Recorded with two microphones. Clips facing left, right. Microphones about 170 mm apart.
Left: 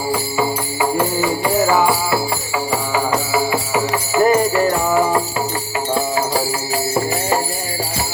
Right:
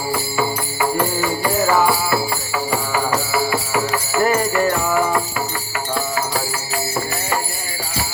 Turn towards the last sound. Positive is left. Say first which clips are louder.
# left 4 dB
turn(degrees=25)  # may be behind; listen again after turning